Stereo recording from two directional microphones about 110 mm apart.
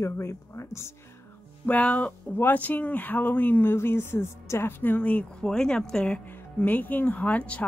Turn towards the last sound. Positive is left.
turn(degrees=15)  # may be behind; listen again after turning